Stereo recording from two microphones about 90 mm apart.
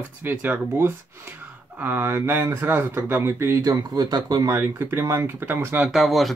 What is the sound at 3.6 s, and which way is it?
Speech, 45° right (ahead or behind).